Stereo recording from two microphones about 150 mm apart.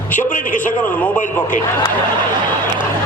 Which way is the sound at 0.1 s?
55° left (ahead or behind).